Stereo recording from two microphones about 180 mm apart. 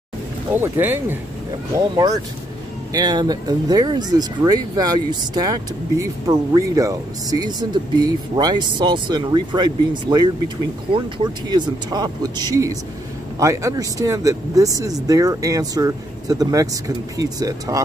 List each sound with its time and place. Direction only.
0.5 s speech: 10° right (ahead or behind)
11.4 s speech: 25° right (ahead or behind)